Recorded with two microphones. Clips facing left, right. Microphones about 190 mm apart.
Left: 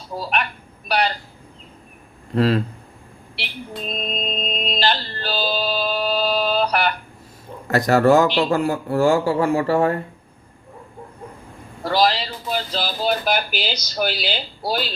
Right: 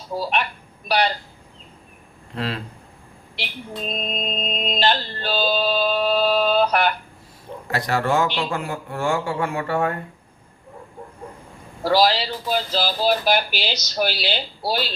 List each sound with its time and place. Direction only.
0.1 s speech: centre (ahead or behind)
2.3 s a man's voice: 40° left (ahead or behind)
3.8 s music: centre (ahead or behind)
7.7 s a man's voice: 45° left (ahead or behind)
11.8 s speech: centre (ahead or behind)